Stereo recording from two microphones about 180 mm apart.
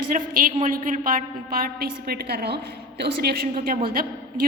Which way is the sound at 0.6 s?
45° right (ahead or behind).